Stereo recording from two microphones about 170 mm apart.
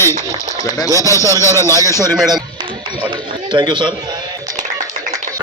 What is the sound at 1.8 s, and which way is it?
Speech, 20° right (ahead or behind).